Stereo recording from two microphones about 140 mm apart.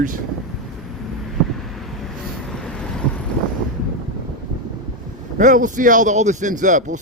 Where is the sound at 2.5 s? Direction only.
5° left (ahead or behind).